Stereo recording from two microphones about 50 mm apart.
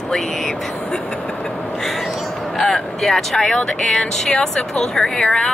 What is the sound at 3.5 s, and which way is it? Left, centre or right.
Speech, centre.